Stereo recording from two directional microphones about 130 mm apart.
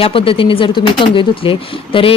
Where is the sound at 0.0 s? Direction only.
45° left (ahead or behind).